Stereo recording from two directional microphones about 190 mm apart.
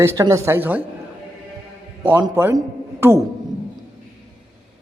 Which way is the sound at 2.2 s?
20° right (ahead or behind).